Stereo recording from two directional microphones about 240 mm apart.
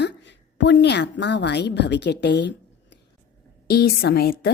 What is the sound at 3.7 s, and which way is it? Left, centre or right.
Speech, left.